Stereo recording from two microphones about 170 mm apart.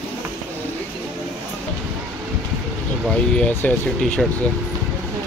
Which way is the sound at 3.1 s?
5° left (ahead or behind).